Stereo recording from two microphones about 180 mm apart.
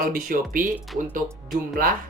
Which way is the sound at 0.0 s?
50° right (ahead or behind).